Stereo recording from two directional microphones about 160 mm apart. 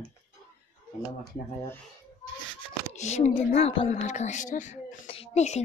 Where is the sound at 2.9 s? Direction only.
45° left (ahead or behind).